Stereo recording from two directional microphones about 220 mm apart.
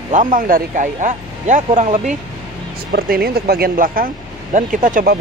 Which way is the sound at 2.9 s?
45° right (ahead or behind).